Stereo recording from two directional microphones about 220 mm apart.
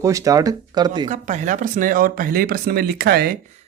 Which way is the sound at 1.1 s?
35° right (ahead or behind).